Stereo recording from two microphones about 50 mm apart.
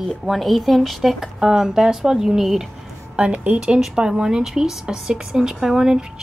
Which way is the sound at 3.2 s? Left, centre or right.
Right.